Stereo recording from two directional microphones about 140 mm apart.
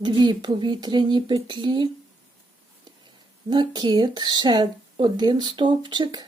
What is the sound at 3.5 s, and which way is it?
Speech, 35° right (ahead or behind).